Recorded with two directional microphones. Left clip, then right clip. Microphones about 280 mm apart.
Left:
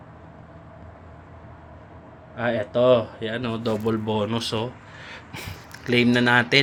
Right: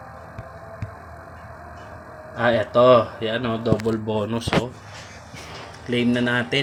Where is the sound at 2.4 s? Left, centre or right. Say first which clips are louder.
Right 5 dB; centre.